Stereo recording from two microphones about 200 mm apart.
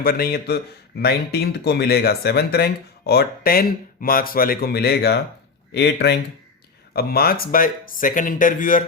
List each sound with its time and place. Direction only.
0.0 s speech: 50° left (ahead or behind)